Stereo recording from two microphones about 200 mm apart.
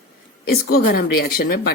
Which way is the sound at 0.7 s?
50° left (ahead or behind).